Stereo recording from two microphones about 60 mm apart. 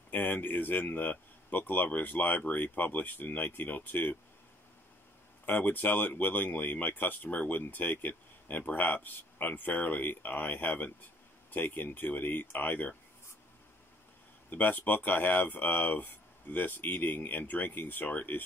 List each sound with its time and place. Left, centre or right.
0.1 s speech: left
5.4 s speech: left
14.5 s speech: left